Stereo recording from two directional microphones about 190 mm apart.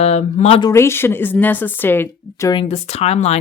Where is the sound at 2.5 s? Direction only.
30° left (ahead or behind).